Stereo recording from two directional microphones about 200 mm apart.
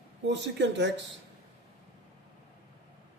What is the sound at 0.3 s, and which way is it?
Speech, 60° right (ahead or behind).